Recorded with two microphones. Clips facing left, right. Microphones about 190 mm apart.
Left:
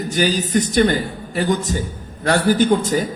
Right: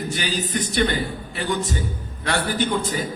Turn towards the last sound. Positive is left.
turn(degrees=45)  # may be behind; listen again after turning